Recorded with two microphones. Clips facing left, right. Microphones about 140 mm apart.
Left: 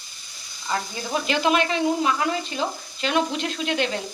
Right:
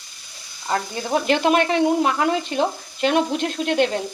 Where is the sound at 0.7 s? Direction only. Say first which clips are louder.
Right 4 dB; 55° right (ahead or behind).